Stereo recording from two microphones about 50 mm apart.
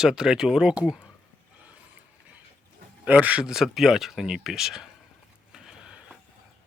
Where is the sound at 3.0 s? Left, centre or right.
Right.